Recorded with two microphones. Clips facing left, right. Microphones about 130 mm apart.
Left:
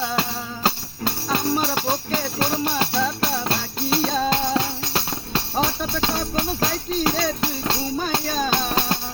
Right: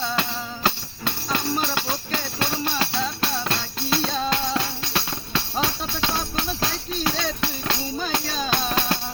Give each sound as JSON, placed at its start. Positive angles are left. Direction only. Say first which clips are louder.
{"t": 0.2, "sound": "music", "louder": "left 1 dB", "side_deg": 35}
{"t": 4.5, "sound": "music", "louder": "left 3 dB", "side_deg": 35}